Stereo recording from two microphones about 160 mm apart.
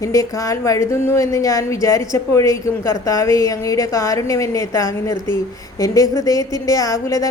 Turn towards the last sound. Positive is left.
turn(degrees=20)  # may be behind; listen again after turning